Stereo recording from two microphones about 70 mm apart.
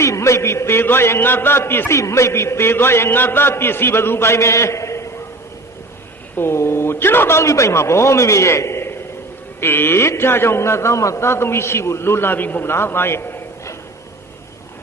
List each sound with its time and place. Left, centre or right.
0.0 s a man's voice: left
2.0 s a man's voice: left
6.3 s a man's voice: left